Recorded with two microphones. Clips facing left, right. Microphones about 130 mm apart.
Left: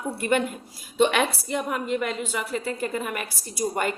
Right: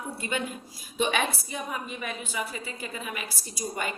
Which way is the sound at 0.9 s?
75° left (ahead or behind).